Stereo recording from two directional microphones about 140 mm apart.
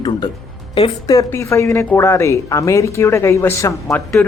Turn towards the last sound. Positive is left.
turn(degrees=20)  # may be behind; listen again after turning